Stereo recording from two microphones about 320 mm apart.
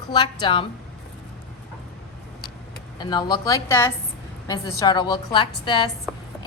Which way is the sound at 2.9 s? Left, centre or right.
Centre.